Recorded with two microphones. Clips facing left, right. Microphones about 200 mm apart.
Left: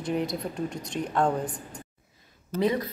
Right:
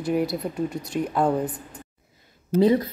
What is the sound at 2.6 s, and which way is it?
Speech, 30° right (ahead or behind).